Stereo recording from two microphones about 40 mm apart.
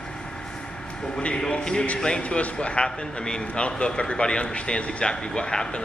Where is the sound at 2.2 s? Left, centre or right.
Left.